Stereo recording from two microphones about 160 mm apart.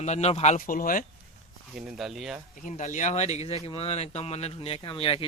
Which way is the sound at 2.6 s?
50° left (ahead or behind).